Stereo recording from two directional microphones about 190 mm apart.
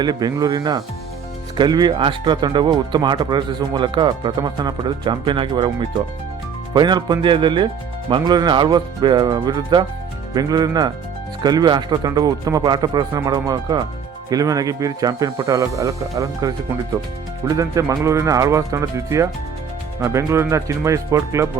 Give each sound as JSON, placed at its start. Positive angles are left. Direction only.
{"t": 0.0, "sound": "speech", "side_deg": -20}